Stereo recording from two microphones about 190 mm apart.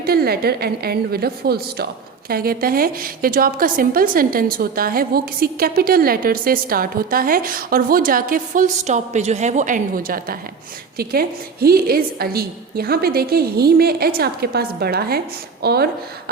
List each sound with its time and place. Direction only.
0.0 s a woman's voice: 55° right (ahead or behind)